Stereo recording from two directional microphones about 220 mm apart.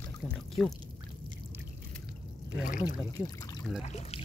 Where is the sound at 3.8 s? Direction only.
30° left (ahead or behind).